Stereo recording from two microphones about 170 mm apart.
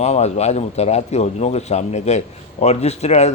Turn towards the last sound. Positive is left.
turn(degrees=40)  # may be behind; listen again after turning